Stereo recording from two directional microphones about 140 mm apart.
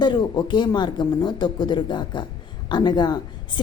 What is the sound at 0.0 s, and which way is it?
A woman's voice, 30° left (ahead or behind).